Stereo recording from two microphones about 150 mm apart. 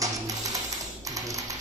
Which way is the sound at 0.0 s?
25° right (ahead or behind).